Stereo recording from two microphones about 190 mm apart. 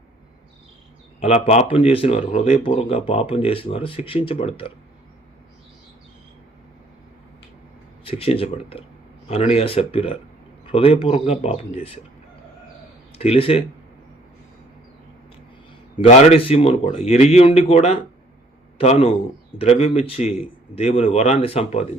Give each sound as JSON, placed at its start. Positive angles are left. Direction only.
{"t": 1.2, "sound": "speech", "side_deg": 35}
{"t": 8.0, "sound": "a man's voice", "side_deg": 30}
{"t": 13.1, "sound": "a man's voice", "side_deg": 30}
{"t": 16.0, "sound": "a man's voice", "side_deg": 35}